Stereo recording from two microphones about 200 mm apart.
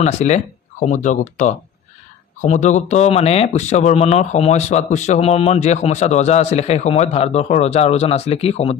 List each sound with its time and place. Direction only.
0.0 s speech: 35° left (ahead or behind)